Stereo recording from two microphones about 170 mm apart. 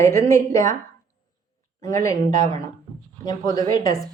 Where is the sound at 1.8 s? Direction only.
20° left (ahead or behind).